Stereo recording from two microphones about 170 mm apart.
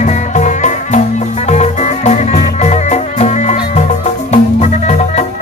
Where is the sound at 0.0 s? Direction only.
45° left (ahead or behind).